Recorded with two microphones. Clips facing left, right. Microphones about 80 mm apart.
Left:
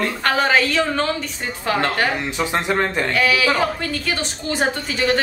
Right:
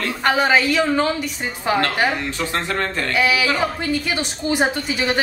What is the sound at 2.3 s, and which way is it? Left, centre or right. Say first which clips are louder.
Speech: left 3 dB; centre.